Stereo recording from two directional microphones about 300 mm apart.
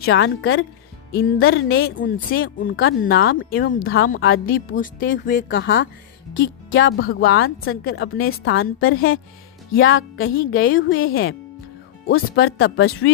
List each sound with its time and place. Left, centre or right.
0.0 s speech: left
3.8 s speech: left